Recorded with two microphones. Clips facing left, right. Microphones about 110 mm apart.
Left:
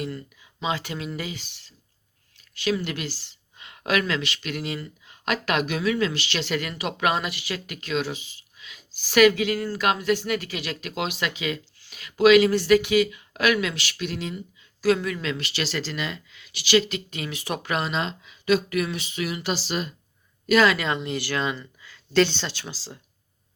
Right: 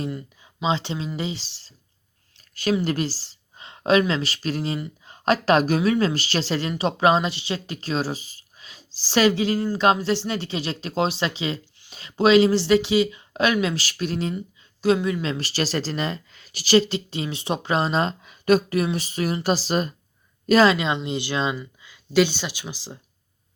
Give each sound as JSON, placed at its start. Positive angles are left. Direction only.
{"t": 0.1, "sound": "speech", "side_deg": -20}
{"t": 2.8, "sound": "speech", "side_deg": -40}
{"t": 14.8, "sound": "speech", "side_deg": -25}
{"t": 18.7, "sound": "speech", "side_deg": -30}
{"t": 20.7, "sound": "speech", "side_deg": -20}